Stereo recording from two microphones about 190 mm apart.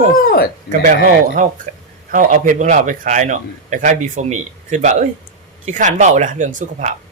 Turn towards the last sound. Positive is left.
turn(degrees=-40)  # may be behind; listen again after turning